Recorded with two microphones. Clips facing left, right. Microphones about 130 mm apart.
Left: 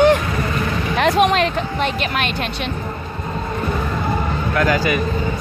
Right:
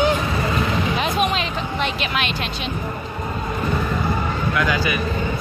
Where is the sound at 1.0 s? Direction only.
75° left (ahead or behind).